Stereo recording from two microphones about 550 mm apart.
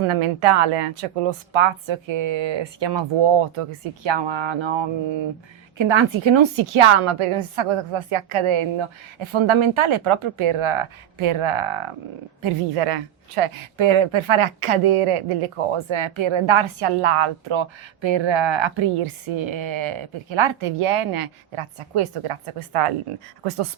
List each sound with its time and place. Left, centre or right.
0.0 s speech: right